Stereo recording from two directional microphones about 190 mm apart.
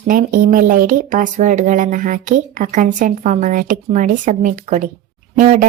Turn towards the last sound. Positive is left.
turn(degrees=-45)  # may be behind; listen again after turning